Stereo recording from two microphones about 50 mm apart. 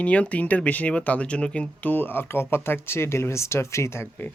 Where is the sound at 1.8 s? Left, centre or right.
Left.